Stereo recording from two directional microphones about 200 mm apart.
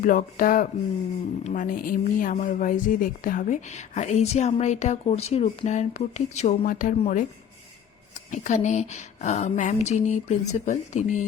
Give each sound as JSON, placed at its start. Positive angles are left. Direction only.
{"t": 0.0, "sound": "a sound", "side_deg": 45}
{"t": 1.5, "sound": "speech", "side_deg": 40}
{"t": 8.3, "sound": "speech", "side_deg": 35}